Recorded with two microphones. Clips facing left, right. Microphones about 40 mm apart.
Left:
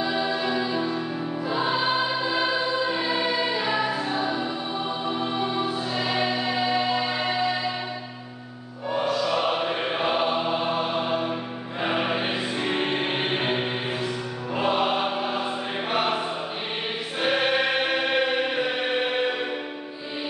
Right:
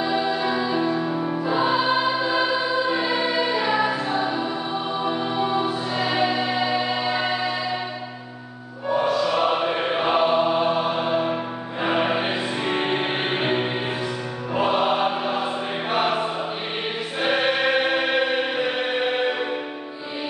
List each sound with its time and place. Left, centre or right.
0.0 s music: centre
1.4 s choir: centre
5.2 s music: centre
8.8 s music: centre
14.5 s choir: centre
18.9 s music: centre